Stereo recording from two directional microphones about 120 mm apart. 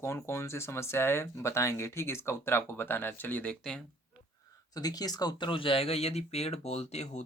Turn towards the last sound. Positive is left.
turn(degrees=65)  # may be behind; listen again after turning